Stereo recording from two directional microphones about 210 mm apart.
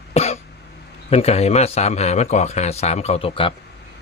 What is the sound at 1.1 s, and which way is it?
A man's voice, 30° left (ahead or behind).